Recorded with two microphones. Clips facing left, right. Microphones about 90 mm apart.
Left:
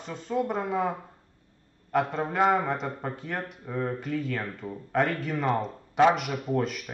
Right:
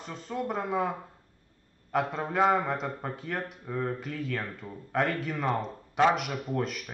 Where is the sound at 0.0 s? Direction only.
Centre (ahead or behind).